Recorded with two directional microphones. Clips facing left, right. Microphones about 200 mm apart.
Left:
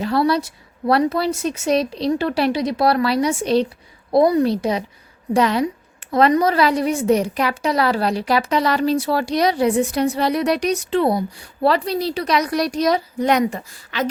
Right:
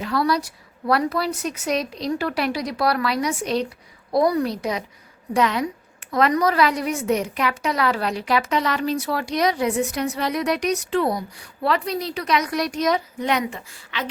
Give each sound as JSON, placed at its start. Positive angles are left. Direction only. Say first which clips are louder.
{"t": 0.0, "sound": "a woman's voice", "louder": "left 4 dB", "side_deg": 30}